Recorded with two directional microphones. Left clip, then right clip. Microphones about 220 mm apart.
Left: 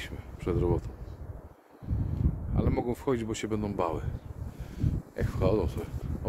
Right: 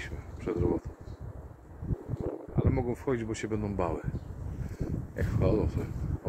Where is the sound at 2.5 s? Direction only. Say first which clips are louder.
Left 2 dB; 25° left (ahead or behind).